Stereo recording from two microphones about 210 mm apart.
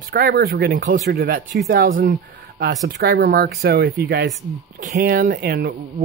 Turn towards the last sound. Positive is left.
turn(degrees=-45)  # may be behind; listen again after turning